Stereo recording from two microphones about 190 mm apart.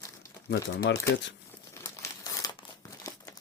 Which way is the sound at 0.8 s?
65° left (ahead or behind).